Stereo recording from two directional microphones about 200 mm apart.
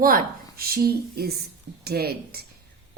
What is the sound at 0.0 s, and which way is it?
Speech, 45° right (ahead or behind).